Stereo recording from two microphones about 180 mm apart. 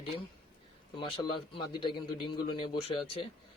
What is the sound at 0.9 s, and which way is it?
Speech, 25° left (ahead or behind).